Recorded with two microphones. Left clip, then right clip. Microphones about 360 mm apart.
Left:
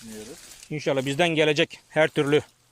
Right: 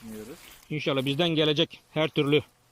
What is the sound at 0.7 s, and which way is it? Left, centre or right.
Speech, centre.